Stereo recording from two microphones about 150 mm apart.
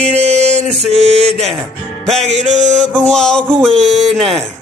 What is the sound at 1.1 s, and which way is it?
Speech, 5° left (ahead or behind).